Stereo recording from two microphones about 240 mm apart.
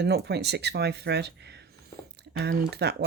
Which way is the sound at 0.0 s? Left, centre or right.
Right.